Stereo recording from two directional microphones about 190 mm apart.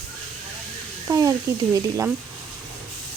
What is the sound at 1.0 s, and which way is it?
Speech, 15° right (ahead or behind).